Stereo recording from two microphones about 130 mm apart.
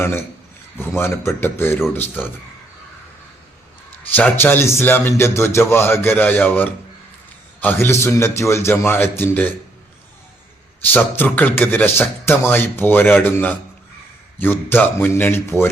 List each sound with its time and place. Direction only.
0.0 s a man's voice: 20° left (ahead or behind)
4.1 s a man's voice: 15° left (ahead or behind)
10.9 s a man's voice: 15° left (ahead or behind)